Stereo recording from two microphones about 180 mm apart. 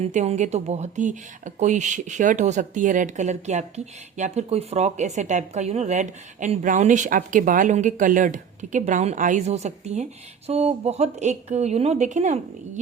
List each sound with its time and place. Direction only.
0.0 s speech: 40° right (ahead or behind)